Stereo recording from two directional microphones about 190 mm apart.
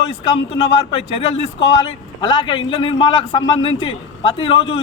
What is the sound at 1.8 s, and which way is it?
A man's voice, 25° left (ahead or behind).